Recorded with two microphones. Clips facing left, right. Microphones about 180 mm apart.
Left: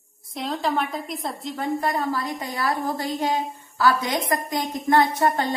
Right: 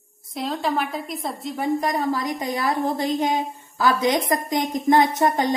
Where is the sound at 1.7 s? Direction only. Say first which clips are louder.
Right 2 dB; 15° right (ahead or behind).